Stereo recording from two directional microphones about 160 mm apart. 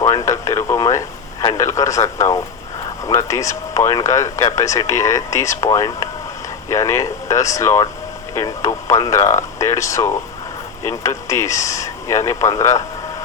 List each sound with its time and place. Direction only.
0.0 s radio: 20° left (ahead or behind)
1.5 s speech: 20° left (ahead or behind)